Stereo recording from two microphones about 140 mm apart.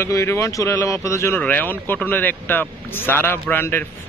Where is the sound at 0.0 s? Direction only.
20° left (ahead or behind).